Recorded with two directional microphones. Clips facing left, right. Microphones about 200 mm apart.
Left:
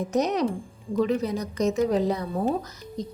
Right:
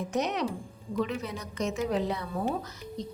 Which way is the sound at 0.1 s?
40° left (ahead or behind).